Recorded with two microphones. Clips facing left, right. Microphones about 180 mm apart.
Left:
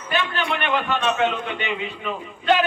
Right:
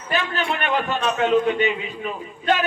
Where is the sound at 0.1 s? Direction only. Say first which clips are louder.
Even; 40° right (ahead or behind).